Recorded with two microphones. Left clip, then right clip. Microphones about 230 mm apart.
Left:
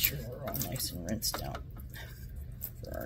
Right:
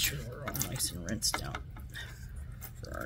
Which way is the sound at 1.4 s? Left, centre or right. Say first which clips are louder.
Even; centre.